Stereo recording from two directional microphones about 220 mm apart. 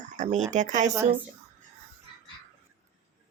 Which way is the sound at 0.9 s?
10° right (ahead or behind).